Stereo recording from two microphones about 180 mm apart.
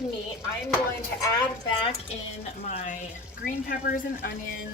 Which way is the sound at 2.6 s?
45° left (ahead or behind).